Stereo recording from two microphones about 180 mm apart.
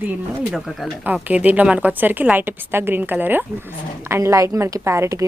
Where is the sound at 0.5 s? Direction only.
5° right (ahead or behind).